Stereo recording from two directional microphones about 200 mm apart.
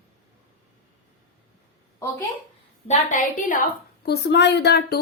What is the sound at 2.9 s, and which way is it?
A woman's voice, 40° left (ahead or behind).